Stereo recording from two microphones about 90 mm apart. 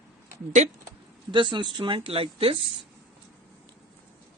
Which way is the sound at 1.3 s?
60° right (ahead or behind).